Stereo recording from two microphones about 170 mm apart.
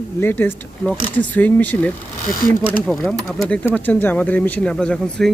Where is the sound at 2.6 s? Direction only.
Centre (ahead or behind).